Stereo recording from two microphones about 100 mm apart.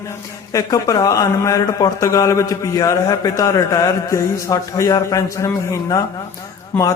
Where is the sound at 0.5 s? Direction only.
35° left (ahead or behind).